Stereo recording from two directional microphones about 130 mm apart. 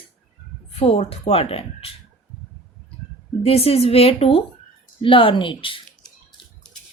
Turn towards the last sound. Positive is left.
turn(degrees=40)  # may be behind; listen again after turning